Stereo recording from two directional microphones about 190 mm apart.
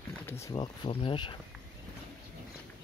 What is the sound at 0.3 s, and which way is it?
Speech, 15° left (ahead or behind).